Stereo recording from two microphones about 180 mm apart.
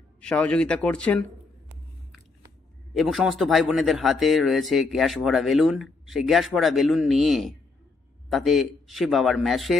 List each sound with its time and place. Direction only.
0.2 s speech: 5° left (ahead or behind)
3.0 s speech: centre (ahead or behind)